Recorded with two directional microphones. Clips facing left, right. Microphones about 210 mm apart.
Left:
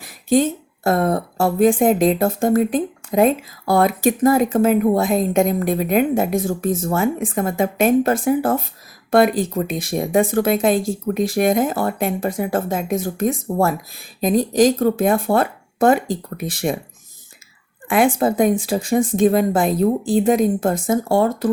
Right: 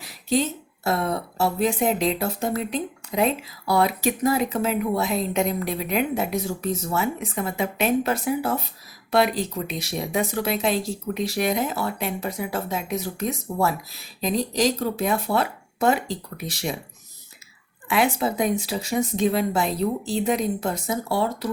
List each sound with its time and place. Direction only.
0.0 s speech: 50° left (ahead or behind)
17.8 s speech: 50° left (ahead or behind)